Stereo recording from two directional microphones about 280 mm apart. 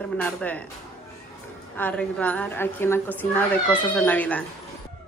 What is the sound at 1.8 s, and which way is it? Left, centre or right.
A woman's voice, centre.